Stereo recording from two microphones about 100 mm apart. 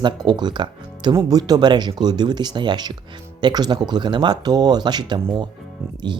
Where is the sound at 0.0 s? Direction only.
45° right (ahead or behind).